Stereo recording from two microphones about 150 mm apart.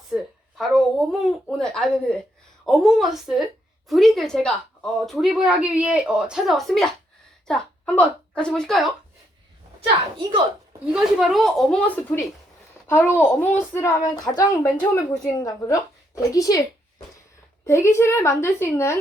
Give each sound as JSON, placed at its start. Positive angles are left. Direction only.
{"t": 0.1, "sound": "a woman's voice", "side_deg": 0}
{"t": 10.9, "sound": "a woman's voice", "side_deg": 0}
{"t": 14.8, "sound": "a woman's voice", "side_deg": 5}
{"t": 15.4, "sound": "a woman's voice", "side_deg": 25}
{"t": 17.7, "sound": "a woman's voice", "side_deg": 20}